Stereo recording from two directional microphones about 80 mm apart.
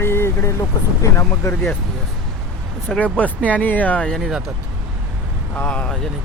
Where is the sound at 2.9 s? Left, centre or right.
Centre.